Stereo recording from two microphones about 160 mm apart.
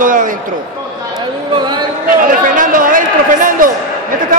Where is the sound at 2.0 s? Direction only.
55° right (ahead or behind).